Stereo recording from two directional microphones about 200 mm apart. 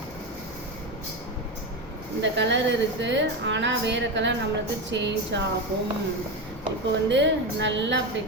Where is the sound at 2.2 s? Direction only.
60° right (ahead or behind).